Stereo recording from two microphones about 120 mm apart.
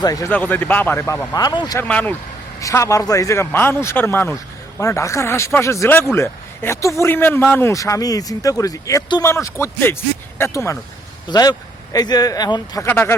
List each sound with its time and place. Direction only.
0.0 s speech: 30° left (ahead or behind)
0.3 s speech: 15° left (ahead or behind); by 1.8 s 35° left (ahead or behind)
1.8 s speech: 15° left (ahead or behind)
2.6 s speech: 25° left (ahead or behind)
7.7 s speech: 25° left (ahead or behind)
11.3 s speech: 35° left (ahead or behind)
12.9 s speech: 20° left (ahead or behind)